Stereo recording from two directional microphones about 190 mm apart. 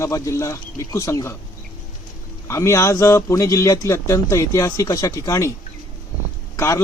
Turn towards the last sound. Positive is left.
turn(degrees=15)  # may be behind; listen again after turning